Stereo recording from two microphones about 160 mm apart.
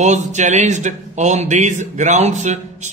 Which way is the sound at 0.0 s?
45° right (ahead or behind).